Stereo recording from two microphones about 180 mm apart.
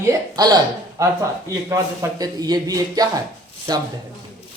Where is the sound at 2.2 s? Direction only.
20° right (ahead or behind).